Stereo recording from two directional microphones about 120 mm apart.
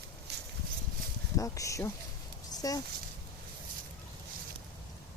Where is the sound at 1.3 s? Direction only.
25° left (ahead or behind).